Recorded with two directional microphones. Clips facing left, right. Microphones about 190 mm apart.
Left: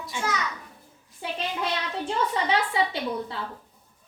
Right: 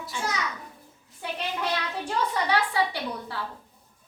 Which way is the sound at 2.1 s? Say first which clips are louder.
Left 1 dB; 25° left (ahead or behind).